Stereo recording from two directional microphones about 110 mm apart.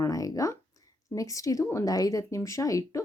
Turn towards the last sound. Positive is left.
turn(degrees=30)  # may be behind; listen again after turning